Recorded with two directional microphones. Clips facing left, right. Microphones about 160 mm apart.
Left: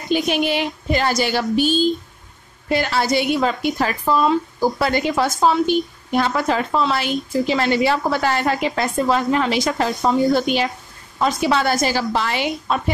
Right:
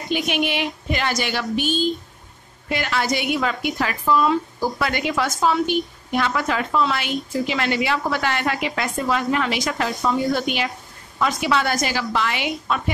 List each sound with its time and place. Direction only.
0.1 s a woman's voice: 35° left (ahead or behind)